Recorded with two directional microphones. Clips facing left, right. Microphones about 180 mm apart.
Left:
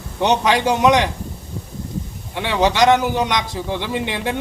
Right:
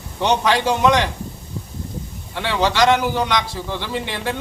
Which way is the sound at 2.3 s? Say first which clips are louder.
Left 2 dB; 15° left (ahead or behind).